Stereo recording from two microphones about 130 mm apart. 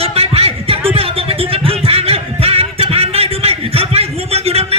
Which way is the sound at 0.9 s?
45° right (ahead or behind).